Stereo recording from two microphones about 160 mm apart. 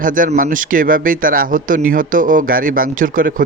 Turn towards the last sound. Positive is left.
turn(degrees=-60)  # may be behind; listen again after turning